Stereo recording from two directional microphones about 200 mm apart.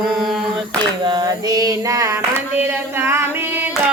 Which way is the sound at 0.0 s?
Centre (ahead or behind).